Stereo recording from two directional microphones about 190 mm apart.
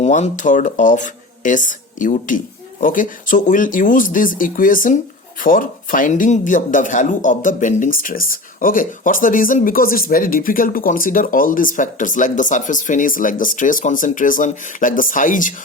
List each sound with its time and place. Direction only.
0.0 s speech: 40° left (ahead or behind)